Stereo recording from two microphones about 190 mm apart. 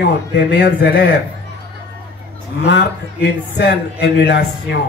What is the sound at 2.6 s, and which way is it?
A man's voice, 65° left (ahead or behind).